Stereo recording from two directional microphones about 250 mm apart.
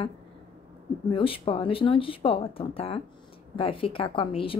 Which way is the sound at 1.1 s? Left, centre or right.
Left.